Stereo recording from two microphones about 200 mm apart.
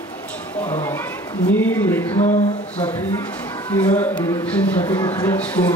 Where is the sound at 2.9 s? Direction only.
10° left (ahead or behind).